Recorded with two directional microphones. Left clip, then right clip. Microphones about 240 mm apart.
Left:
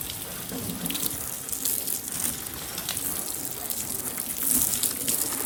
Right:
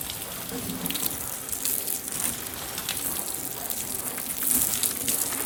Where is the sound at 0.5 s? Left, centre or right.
Centre.